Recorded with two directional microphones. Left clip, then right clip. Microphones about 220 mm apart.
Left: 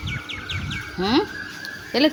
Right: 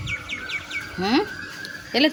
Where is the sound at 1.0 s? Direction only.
Centre (ahead or behind).